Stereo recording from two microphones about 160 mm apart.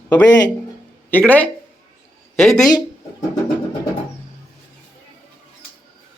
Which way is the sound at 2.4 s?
Centre (ahead or behind).